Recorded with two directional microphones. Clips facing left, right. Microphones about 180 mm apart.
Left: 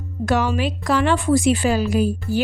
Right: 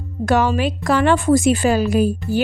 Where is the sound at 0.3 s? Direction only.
50° right (ahead or behind).